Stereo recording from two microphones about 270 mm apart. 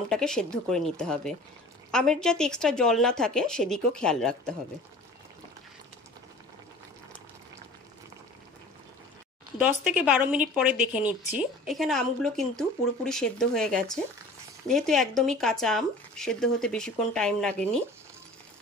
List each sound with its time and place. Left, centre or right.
0.1 s a woman's voice: centre
9.6 s a woman's voice: centre